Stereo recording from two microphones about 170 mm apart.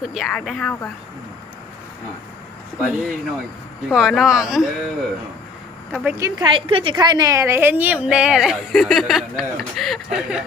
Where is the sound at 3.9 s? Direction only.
5° right (ahead or behind).